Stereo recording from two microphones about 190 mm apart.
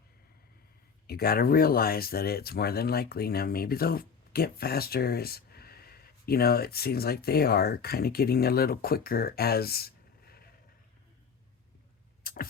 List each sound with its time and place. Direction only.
1.0 s speech: 55° left (ahead or behind)
12.2 s vehicle: 50° left (ahead or behind)